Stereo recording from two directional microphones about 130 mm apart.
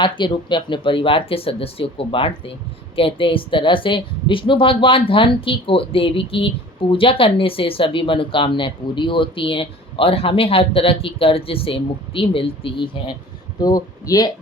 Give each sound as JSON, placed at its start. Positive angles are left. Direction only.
{"t": 0.0, "sound": "speech", "side_deg": 40}
{"t": 13.6, "sound": "speech", "side_deg": 30}